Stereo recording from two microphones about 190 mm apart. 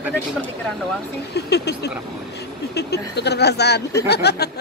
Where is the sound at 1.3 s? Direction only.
60° left (ahead or behind).